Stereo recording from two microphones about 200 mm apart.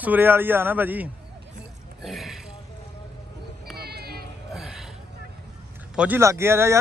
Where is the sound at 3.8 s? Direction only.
50° right (ahead or behind).